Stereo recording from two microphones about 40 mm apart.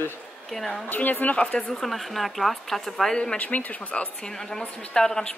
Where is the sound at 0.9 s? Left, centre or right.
Left.